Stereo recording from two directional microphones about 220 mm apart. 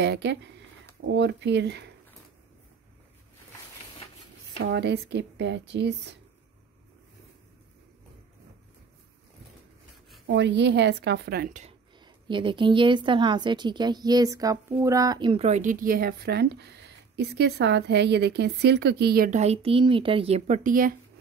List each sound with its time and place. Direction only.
0.0 s speech: 50° right (ahead or behind)
4.6 s speech: 50° right (ahead or behind)
10.2 s speech: 55° right (ahead or behind); by 11.7 s 35° right (ahead or behind)
12.0 s a woman's voice: 20° right (ahead or behind); by 20.9 s 40° right (ahead or behind)